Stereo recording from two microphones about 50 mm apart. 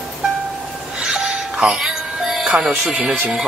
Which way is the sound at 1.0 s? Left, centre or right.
Centre.